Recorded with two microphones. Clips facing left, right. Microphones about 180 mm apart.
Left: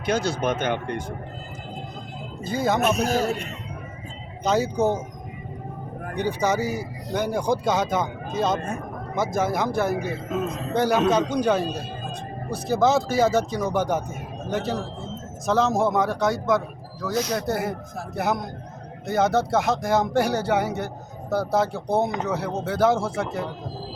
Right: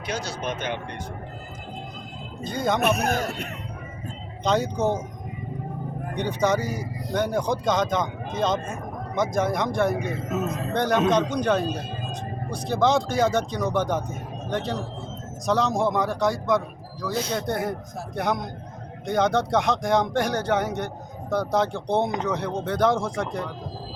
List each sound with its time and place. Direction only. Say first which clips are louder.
0.0 s speech: left 6 dB; 55° left (ahead or behind)
2.4 s speech: left 2 dB; 5° left (ahead or behind)
2.8 s speech: left 2 dB; 60° right (ahead or behind)
4.4 s speech: left 1 dB; 5° left (ahead or behind)
6.1 s speech: even; 10° left (ahead or behind)